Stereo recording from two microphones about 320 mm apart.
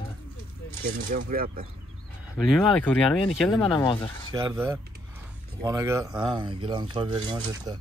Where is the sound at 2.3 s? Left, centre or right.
Centre.